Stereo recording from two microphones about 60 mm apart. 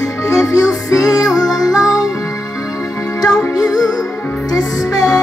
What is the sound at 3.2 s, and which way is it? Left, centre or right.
Music, left.